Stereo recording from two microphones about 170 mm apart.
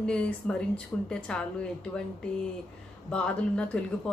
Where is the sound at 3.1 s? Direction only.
5° left (ahead or behind).